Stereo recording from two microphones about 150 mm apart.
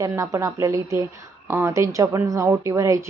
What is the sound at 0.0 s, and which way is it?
A woman's voice, 20° right (ahead or behind).